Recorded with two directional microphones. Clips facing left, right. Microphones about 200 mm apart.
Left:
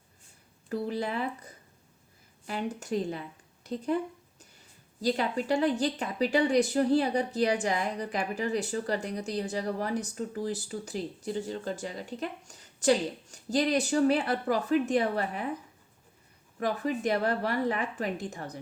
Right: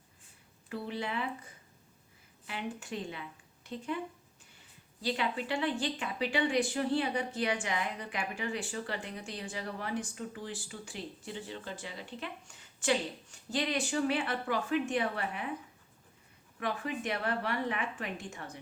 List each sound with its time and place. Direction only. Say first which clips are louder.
0.7 s speech: left 6 dB; 40° left (ahead or behind)
16.6 s speech: left 6 dB; 40° left (ahead or behind)